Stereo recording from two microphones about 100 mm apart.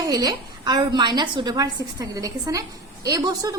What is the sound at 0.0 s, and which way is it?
A woman's voice, 40° right (ahead or behind).